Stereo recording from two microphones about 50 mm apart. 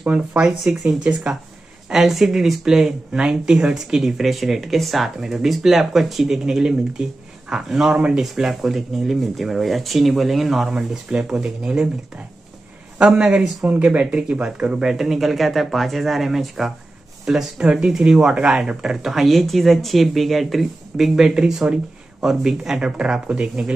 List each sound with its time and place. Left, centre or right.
0.5 s speech: centre
1.3 s speech: centre
1.9 s speech: centre
11.1 s speech: centre
13.0 s speech: centre
19.0 s speech: centre
21.2 s speech: centre